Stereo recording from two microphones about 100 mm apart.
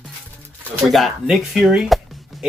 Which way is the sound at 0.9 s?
Centre (ahead or behind).